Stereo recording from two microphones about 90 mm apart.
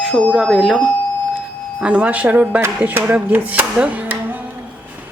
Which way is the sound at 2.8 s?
15° right (ahead or behind).